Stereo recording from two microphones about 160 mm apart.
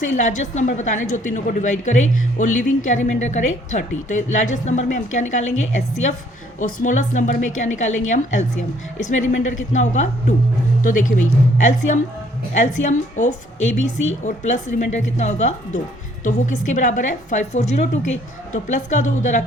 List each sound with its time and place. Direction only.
0.0 s a woman's voice: 50° left (ahead or behind)